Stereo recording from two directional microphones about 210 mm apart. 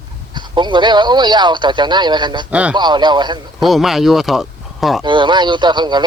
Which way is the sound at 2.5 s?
5° right (ahead or behind).